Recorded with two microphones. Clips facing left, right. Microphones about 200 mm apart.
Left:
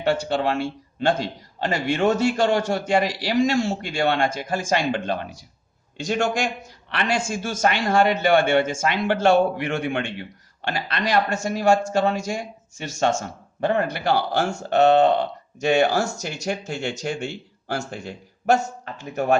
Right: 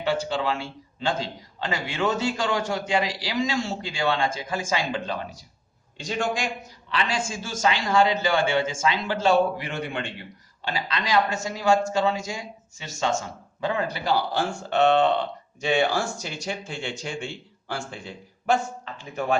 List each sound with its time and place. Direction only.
0.0 s speech: 60° left (ahead or behind)
6.0 s speech: 45° left (ahead or behind)
6.9 s a man's voice: 65° left (ahead or behind)
14.3 s speech: 45° left (ahead or behind)